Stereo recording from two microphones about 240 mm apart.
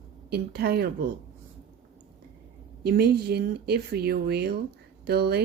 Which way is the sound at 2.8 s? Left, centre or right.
Right.